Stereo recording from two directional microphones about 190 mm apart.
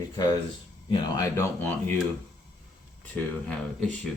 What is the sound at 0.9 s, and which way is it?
Speech, 15° left (ahead or behind).